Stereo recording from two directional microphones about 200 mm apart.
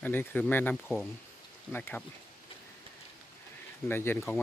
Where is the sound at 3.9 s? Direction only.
10° left (ahead or behind).